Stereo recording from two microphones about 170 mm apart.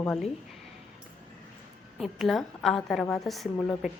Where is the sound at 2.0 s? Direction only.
Centre (ahead or behind).